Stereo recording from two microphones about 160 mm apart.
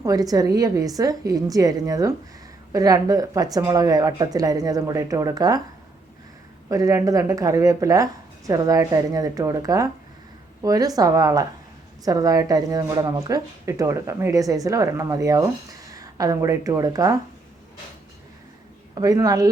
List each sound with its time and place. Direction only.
0.0 s speech: 20° right (ahead or behind)
6.7 s speech: 20° right (ahead or behind)
18.9 s speech: 25° right (ahead or behind)